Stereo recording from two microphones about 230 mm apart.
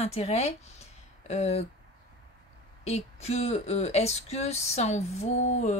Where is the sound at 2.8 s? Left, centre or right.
Left.